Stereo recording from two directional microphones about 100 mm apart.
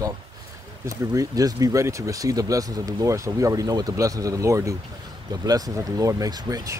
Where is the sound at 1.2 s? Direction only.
35° right (ahead or behind).